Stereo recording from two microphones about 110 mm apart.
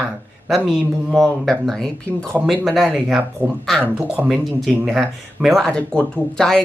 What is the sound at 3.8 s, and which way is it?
Speech, 15° right (ahead or behind).